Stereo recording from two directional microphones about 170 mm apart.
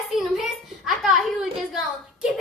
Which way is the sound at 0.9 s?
Centre (ahead or behind).